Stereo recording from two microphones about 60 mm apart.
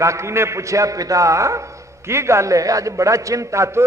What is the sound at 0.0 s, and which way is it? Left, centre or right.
A man's voice, right.